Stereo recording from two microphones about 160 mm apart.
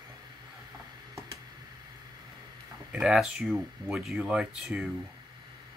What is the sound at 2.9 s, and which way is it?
Speech, 5° right (ahead or behind).